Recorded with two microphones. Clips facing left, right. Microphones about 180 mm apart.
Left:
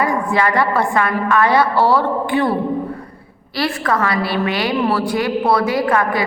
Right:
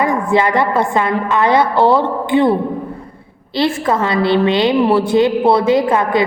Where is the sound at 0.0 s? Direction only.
20° right (ahead or behind).